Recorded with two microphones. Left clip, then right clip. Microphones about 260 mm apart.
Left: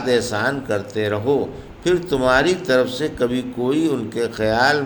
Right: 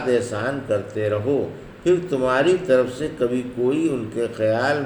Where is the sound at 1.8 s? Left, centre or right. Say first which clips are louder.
Left 2 dB; left.